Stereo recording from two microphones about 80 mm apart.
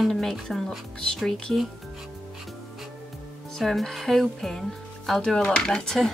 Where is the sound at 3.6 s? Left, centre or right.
Centre.